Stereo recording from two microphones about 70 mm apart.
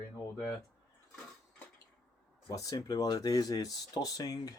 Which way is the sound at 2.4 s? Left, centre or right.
Left.